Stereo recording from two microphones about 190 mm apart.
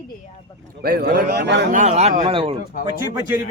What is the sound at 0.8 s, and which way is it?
Speech, 55° right (ahead or behind).